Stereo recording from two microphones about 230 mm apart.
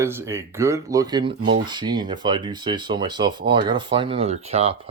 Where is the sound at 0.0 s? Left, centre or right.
Centre.